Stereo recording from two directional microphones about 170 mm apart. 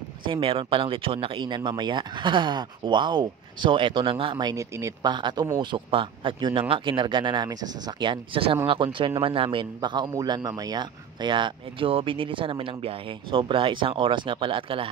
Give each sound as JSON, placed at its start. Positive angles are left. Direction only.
{"t": 0.2, "sound": "speech", "side_deg": -30}